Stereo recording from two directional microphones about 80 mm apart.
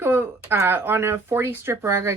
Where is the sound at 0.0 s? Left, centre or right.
Right.